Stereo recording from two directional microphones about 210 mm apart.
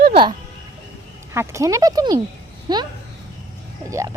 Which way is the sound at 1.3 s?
15° right (ahead or behind).